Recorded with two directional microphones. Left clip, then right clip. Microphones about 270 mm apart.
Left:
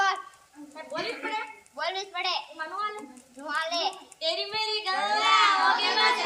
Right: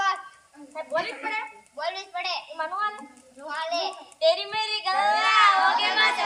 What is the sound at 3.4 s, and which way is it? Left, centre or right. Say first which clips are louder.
Speech: even; centre.